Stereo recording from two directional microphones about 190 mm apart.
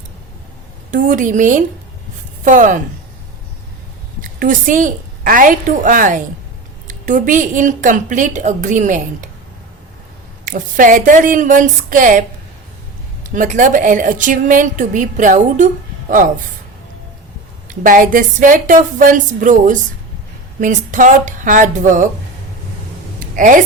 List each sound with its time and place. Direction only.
0.9 s a woman's voice: 40° right (ahead or behind)
4.2 s a woman's voice: 45° right (ahead or behind)
10.4 s a woman's voice: 45° right (ahead or behind)
13.2 s a woman's voice: 40° right (ahead or behind)
17.7 s a woman's voice: 45° right (ahead or behind)
23.3 s a woman's voice: 45° right (ahead or behind)